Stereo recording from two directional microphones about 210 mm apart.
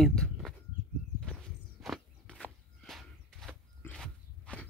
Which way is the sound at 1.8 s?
Centre (ahead or behind).